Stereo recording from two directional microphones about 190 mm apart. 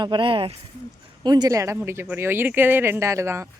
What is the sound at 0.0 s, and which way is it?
Speech, 25° right (ahead or behind).